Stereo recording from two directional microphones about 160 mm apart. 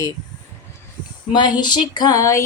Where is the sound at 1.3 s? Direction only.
30° left (ahead or behind).